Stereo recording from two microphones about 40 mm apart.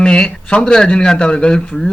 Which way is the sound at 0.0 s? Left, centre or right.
Left.